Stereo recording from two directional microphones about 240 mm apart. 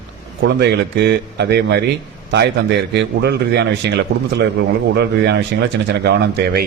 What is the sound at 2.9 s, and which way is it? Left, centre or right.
Speech, right.